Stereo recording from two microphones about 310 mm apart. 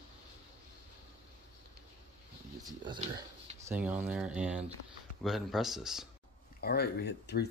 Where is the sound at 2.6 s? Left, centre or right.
Centre.